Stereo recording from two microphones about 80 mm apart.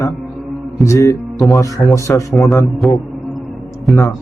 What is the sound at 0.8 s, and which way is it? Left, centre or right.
Music, left.